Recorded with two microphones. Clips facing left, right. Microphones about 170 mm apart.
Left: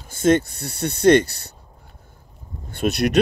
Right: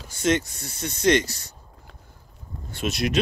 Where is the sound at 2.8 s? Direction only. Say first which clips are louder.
Left 6 dB; 60° left (ahead or behind).